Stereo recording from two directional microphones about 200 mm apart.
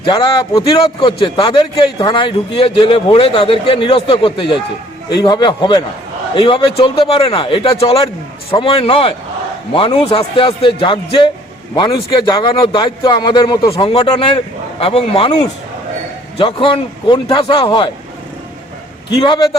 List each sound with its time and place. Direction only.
0.0 s speech: 25° left (ahead or behind)
19.2 s speech: 20° left (ahead or behind)